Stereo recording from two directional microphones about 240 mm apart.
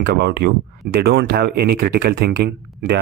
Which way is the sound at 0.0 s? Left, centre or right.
Right.